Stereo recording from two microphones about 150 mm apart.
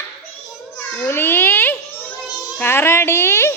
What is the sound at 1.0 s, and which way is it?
A child's voice, 15° left (ahead or behind).